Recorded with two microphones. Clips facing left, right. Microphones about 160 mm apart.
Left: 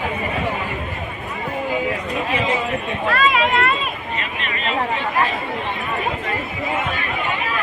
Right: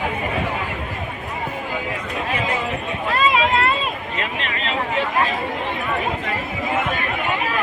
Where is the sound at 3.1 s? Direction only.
25° right (ahead or behind).